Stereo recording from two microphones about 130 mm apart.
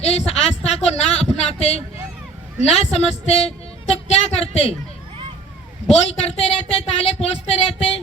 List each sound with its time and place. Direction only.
0.0 s a sound: 55° left (ahead or behind)
2.6 s speech: 55° left (ahead or behind)
6.0 s speech: 50° left (ahead or behind)